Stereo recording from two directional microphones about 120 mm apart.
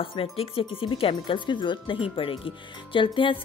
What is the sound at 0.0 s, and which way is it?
Speech, 50° left (ahead or behind).